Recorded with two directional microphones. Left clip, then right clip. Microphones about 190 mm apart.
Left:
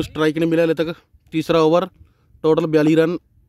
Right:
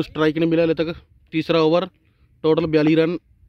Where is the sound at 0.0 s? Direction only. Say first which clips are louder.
Left 1 dB; 5° left (ahead or behind).